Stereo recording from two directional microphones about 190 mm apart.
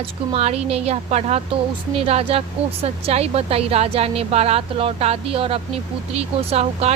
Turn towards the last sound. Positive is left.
turn(degrees=-35)  # may be behind; listen again after turning